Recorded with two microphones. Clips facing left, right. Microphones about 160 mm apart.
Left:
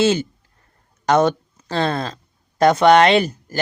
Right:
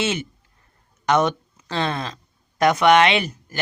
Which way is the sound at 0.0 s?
30° left (ahead or behind).